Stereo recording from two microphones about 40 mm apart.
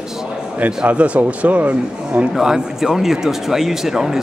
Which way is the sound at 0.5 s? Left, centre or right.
Right.